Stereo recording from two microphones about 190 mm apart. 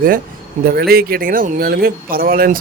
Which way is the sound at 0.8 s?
55° right (ahead or behind).